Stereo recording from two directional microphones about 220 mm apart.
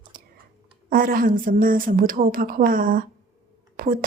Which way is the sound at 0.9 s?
40° right (ahead or behind).